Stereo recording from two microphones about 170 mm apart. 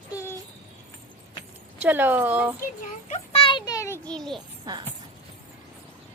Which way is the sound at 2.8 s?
40° left (ahead or behind).